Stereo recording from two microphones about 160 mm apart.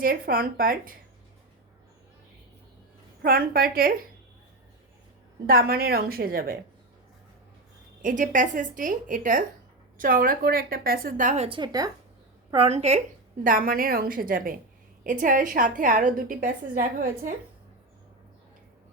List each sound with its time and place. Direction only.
0.0 s a woman's voice: 65° right (ahead or behind)
3.2 s a woman's voice: 65° right (ahead or behind)
5.5 s a woman's voice: 70° right (ahead or behind)
8.0 s a woman's voice: 55° right (ahead or behind)
11.4 s speech: 30° right (ahead or behind)
12.5 s a woman's voice: 40° right (ahead or behind)
13.4 s a woman's voice: 60° right (ahead or behind)